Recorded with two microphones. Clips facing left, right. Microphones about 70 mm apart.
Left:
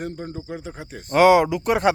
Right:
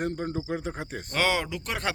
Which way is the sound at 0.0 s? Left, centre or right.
Right.